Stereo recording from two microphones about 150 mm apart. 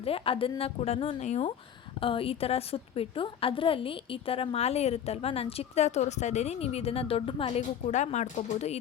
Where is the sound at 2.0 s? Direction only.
35° left (ahead or behind).